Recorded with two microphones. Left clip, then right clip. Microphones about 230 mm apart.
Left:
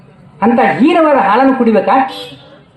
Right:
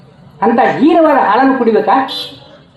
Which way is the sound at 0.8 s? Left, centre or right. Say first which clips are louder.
Right 1 dB; left.